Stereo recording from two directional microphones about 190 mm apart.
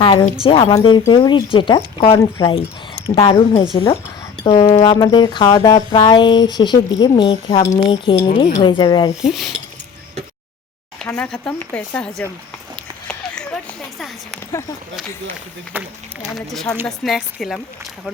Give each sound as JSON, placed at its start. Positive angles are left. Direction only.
{"t": 0.0, "sound": "a woman's voice", "side_deg": 25}
{"t": 3.2, "sound": "speech", "side_deg": 20}
{"t": 9.2, "sound": "speech", "side_deg": 0}
{"t": 11.0, "sound": "speech", "side_deg": 5}
{"t": 13.1, "sound": "a sound", "side_deg": 5}
{"t": 15.7, "sound": "speech", "side_deg": -10}
{"t": 16.2, "sound": "speech", "side_deg": 0}